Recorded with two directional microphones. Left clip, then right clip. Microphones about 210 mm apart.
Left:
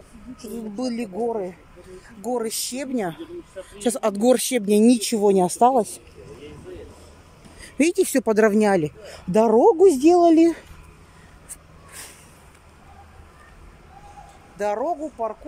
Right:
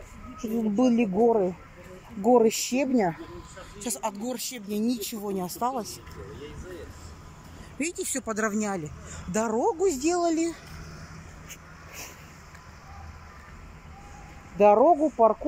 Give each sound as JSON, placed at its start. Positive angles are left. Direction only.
{"t": 0.4, "sound": "speech", "side_deg": -10}
{"t": 3.8, "sound": "speech", "side_deg": 50}
{"t": 8.0, "sound": "speech", "side_deg": 40}
{"t": 14.8, "sound": "speech", "side_deg": -15}